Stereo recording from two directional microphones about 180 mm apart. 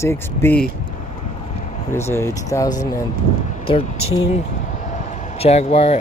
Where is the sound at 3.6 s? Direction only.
30° left (ahead or behind).